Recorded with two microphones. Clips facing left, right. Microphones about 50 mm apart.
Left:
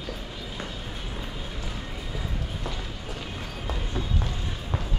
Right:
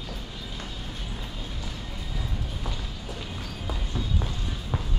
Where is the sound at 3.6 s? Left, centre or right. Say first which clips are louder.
Left 2 dB; left.